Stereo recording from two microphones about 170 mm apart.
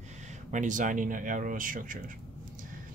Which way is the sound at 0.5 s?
50° right (ahead or behind).